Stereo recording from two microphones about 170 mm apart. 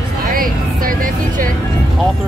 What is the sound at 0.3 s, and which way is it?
Music, 55° right (ahead or behind).